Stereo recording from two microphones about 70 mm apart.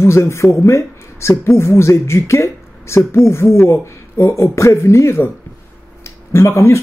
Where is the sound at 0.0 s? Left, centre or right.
Left.